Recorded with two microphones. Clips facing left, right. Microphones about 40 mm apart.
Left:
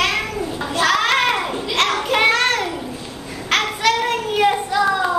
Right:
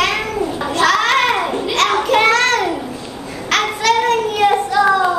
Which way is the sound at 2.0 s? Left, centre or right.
Centre.